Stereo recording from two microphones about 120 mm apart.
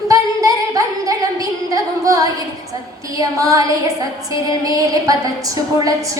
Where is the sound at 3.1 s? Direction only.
30° right (ahead or behind).